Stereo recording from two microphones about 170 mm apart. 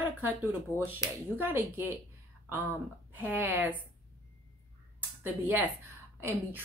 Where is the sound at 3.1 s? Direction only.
10° right (ahead or behind).